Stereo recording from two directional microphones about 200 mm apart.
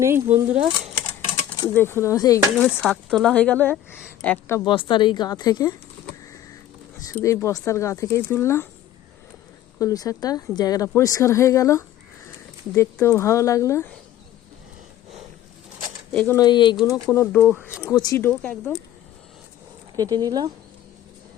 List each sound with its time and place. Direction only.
0.3 s speech: 35° right (ahead or behind)
1.4 s a sound: 20° left (ahead or behind)
1.7 s a woman's voice: 10° left (ahead or behind)
2.6 s a woman's voice: 5° left (ahead or behind)
4.6 s speech: 25° left (ahead or behind)
7.0 s a woman's voice: 15° left (ahead or behind)
9.7 s a woman's voice: 15° left (ahead or behind)
16.1 s a woman's voice: 10° left (ahead or behind)
17.4 s speech: 10° right (ahead or behind)
17.8 s a woman's voice: 15° left (ahead or behind)
20.0 s speech: 20° right (ahead or behind)